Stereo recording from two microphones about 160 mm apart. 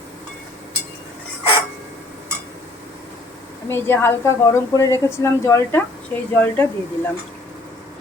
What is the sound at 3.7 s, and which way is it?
A woman's voice, 15° left (ahead or behind).